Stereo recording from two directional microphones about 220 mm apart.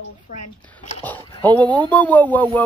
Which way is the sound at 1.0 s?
10° left (ahead or behind).